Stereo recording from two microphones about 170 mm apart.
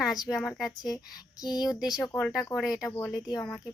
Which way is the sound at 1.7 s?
Centre (ahead or behind).